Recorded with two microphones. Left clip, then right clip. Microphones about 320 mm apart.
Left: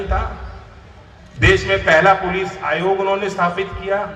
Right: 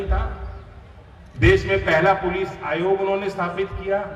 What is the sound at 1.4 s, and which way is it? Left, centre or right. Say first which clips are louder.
A man's voice: left 3 dB; left.